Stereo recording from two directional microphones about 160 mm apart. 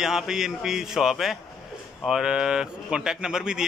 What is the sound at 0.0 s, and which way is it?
Speech, 5° right (ahead or behind).